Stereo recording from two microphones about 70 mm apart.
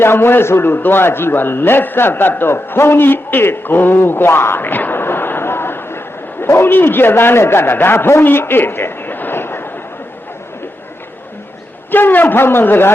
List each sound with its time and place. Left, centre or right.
0.0 s a man's voice: left
11.9 s a man's voice: left